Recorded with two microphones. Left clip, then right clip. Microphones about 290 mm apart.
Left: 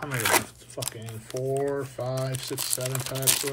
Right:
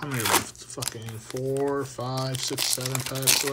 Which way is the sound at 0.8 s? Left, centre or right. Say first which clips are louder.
Right 2 dB; centre.